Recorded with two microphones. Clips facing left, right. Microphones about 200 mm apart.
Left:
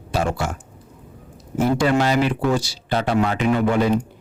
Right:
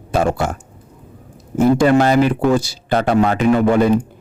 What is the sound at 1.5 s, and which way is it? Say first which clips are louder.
Speech: right 6 dB; 50° right (ahead or behind).